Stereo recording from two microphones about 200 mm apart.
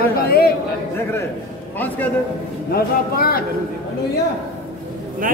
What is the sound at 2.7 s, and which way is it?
Speech, 50° left (ahead or behind).